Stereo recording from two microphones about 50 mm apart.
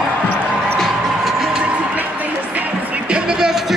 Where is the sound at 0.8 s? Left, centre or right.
Centre.